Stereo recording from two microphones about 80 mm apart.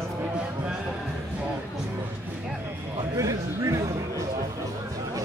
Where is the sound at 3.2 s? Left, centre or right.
Right.